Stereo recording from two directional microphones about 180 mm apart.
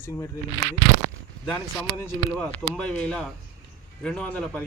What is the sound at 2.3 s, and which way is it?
Speech, centre (ahead or behind).